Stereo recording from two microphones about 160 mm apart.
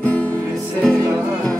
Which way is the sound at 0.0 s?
10° left (ahead or behind).